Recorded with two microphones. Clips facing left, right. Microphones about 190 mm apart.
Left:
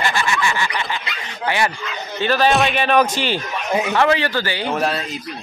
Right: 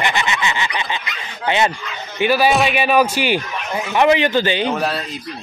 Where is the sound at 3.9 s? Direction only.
15° right (ahead or behind).